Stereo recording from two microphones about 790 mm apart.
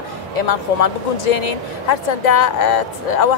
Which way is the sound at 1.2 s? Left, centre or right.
Left.